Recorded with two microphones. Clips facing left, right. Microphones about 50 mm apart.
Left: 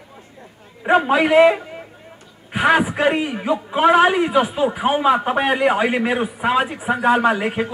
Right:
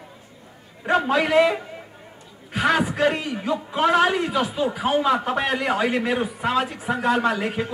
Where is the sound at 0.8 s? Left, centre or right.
Left.